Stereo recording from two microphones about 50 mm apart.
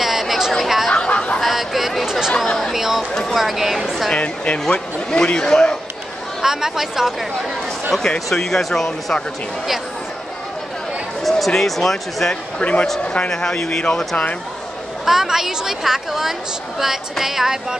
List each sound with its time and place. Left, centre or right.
0.0 s chatter: centre
0.9 s chatter: left
1.4 s chatter: centre
2.3 s chatter: centre
2.7 s a sound: centre
3.3 s speech: centre
4.1 s speech: left
4.6 s speech: centre
6.4 s a woman's voice: centre
8.3 s speech: centre
11.2 s speech: centre
12.5 s speech: left
15.0 s a woman's voice: centre